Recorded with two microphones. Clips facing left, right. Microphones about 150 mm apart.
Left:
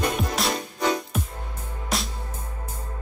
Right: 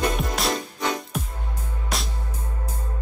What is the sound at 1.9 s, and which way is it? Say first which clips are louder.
Music: left 2 dB; centre (ahead or behind).